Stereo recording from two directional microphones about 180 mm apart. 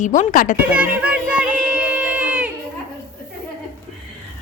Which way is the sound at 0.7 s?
10° right (ahead or behind).